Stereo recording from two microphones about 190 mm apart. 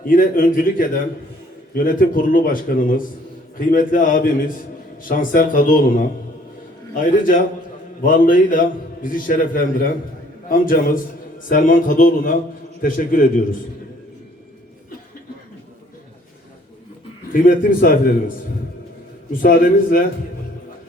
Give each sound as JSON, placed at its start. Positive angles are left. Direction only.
{"t": 0.0, "sound": "a man's voice", "side_deg": 50}
{"t": 8.0, "sound": "a man's voice", "side_deg": 45}
{"t": 17.3, "sound": "a man's voice", "side_deg": 45}
{"t": 19.3, "sound": "a man's voice", "side_deg": 45}